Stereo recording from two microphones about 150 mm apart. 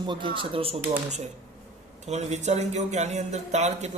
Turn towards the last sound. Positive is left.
turn(degrees=-50)  # may be behind; listen again after turning